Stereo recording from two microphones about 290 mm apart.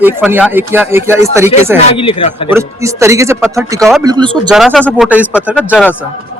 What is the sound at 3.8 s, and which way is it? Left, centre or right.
Speech, centre.